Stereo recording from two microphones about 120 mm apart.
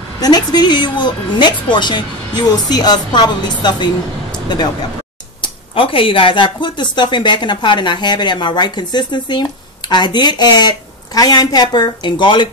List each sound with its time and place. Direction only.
0.2 s speech: 35° left (ahead or behind)